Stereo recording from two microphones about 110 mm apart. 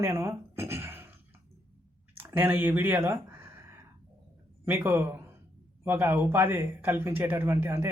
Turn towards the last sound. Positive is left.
turn(degrees=-20)  # may be behind; listen again after turning